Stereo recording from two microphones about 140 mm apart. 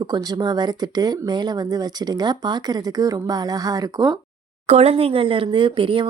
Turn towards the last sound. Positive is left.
turn(degrees=-40)  # may be behind; listen again after turning